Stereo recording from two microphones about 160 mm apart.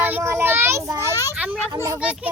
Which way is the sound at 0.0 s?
15° right (ahead or behind).